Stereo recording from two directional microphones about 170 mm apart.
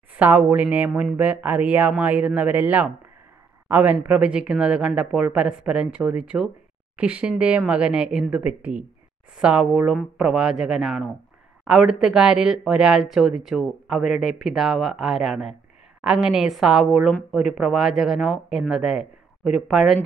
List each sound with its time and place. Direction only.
0.2 s a woman's voice: 10° right (ahead or behind)